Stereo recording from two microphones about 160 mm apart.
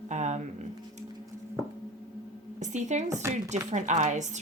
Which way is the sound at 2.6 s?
50° right (ahead or behind).